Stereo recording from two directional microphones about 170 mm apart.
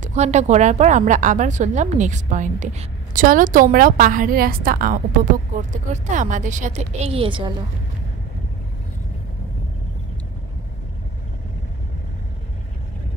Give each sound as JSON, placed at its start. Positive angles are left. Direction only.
{"t": 0.0, "sound": "a woman's voice", "side_deg": -40}